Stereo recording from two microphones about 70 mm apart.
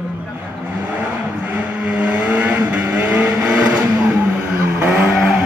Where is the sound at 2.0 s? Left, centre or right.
Centre.